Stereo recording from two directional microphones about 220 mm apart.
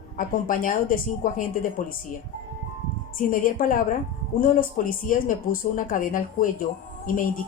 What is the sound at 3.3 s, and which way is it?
Speech, 40° left (ahead or behind).